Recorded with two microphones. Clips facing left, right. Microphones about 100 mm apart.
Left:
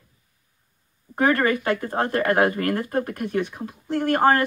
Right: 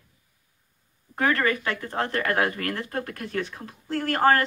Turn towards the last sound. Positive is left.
turn(degrees=20)  # may be behind; listen again after turning